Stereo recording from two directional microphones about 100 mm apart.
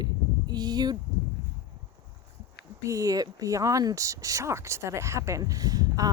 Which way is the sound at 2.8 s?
35° right (ahead or behind).